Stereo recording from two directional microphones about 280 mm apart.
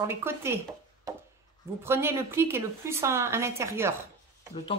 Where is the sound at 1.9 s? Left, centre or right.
Centre.